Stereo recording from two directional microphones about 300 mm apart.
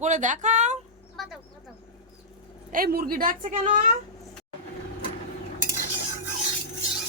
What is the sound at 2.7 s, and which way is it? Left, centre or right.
A woman's voice, right.